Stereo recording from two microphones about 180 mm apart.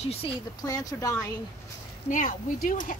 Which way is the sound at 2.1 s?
50° left (ahead or behind).